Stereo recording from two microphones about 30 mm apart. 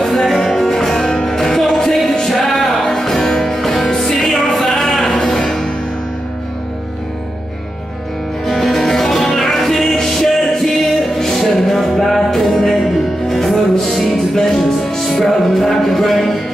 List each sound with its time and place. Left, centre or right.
0.0 s music: centre
5.2 s music: centre
8.5 s music: centre